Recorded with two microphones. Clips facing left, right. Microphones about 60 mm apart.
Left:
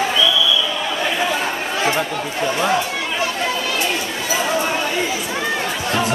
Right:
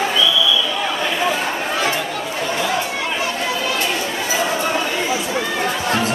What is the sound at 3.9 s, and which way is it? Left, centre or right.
Chatter, centre.